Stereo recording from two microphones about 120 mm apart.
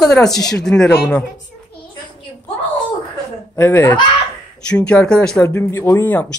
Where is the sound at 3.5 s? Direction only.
15° left (ahead or behind).